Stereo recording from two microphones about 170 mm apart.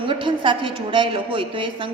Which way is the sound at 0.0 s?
30° right (ahead or behind).